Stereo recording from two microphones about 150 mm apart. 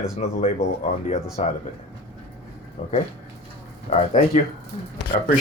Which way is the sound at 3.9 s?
50° left (ahead or behind).